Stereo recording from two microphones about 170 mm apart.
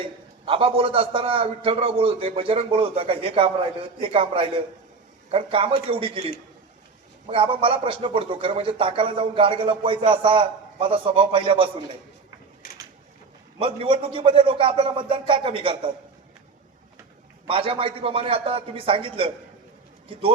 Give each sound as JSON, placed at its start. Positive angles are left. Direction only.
{"t": 0.4, "sound": "a man's voice", "side_deg": -30}
{"t": 13.6, "sound": "a man's voice", "side_deg": -30}
{"t": 17.5, "sound": "a man's voice", "side_deg": -35}